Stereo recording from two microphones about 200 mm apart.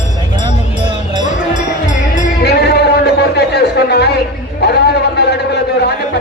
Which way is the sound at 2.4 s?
55° left (ahead or behind).